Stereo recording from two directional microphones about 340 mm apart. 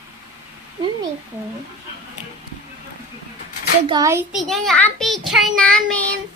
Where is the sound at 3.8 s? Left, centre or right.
Centre.